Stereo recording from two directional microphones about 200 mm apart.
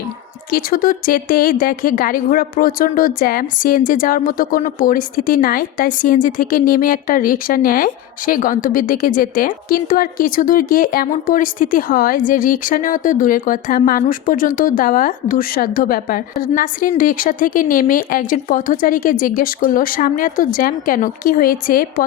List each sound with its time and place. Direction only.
0.5 s a woman's voice: 45° left (ahead or behind)